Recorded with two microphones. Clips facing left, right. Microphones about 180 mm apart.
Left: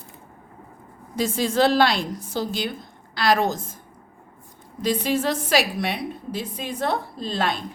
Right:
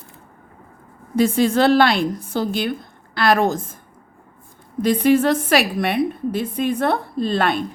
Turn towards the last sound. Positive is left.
turn(degrees=-60)  # may be behind; listen again after turning